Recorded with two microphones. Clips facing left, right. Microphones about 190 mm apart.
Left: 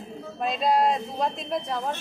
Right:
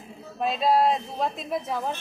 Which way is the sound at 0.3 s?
5° right (ahead or behind).